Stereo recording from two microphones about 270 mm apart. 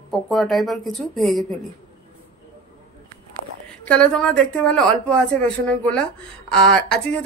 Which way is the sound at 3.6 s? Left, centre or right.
Centre.